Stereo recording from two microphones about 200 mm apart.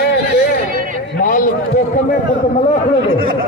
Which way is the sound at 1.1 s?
40° left (ahead or behind).